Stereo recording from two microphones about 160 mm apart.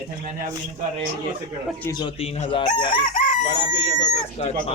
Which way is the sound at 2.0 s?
40° left (ahead or behind).